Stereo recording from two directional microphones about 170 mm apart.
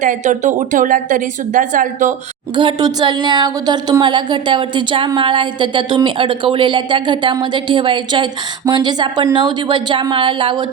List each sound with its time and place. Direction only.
0.0 s speech: 45° right (ahead or behind)
2.6 s a woman's voice: 25° right (ahead or behind)